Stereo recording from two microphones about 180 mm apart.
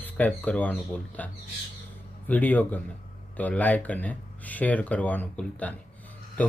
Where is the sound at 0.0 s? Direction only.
10° left (ahead or behind).